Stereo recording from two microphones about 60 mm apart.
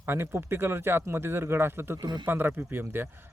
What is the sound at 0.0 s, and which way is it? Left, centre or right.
Speech, right.